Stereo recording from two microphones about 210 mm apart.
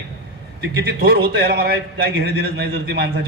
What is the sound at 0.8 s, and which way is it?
A man's voice, 50° right (ahead or behind).